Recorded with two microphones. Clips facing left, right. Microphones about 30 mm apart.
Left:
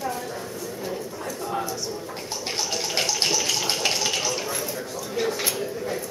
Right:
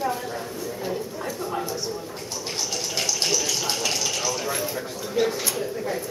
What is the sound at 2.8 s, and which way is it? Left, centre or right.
Water, left.